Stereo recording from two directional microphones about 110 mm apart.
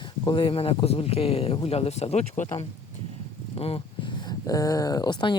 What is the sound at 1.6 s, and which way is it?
Speech, 75° left (ahead or behind).